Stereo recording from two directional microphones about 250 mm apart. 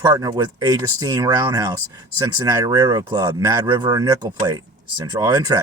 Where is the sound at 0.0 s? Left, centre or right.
Centre.